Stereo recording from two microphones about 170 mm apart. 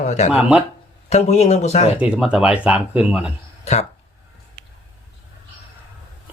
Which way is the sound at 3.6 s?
40° left (ahead or behind).